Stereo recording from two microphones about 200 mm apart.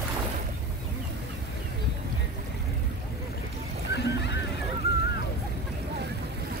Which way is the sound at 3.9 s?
60° left (ahead or behind).